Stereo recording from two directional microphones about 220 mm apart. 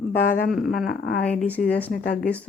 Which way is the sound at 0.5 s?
Centre (ahead or behind).